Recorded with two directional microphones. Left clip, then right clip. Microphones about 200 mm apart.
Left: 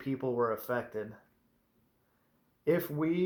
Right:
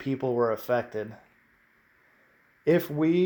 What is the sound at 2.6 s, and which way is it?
Speech, 45° right (ahead or behind).